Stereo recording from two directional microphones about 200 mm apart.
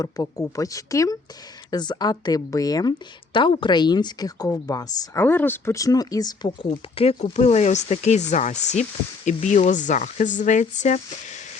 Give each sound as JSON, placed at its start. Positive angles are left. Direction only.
{"t": 0.0, "sound": "speech", "side_deg": 15}